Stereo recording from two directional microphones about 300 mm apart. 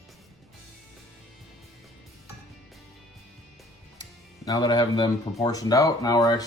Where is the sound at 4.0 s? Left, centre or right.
Centre.